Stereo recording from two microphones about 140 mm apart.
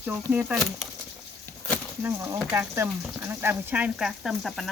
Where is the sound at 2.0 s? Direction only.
15° right (ahead or behind).